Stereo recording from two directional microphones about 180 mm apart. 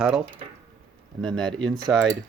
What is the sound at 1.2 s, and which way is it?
Speech, centre (ahead or behind).